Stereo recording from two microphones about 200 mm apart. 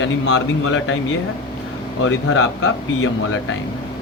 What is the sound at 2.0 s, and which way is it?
Speech, 70° left (ahead or behind).